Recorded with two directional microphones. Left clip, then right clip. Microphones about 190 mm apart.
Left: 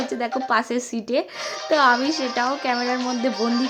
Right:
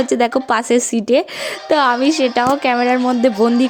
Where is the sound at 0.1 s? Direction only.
55° right (ahead or behind).